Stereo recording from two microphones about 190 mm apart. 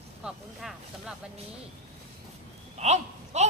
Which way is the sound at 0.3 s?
Centre (ahead or behind).